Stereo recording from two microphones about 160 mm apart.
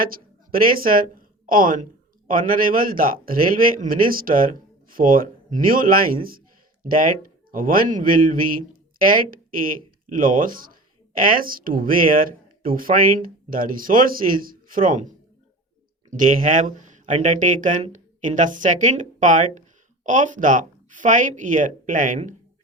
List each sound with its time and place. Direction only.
0.5 s speech: 65° right (ahead or behind)
16.1 s speech: 55° right (ahead or behind)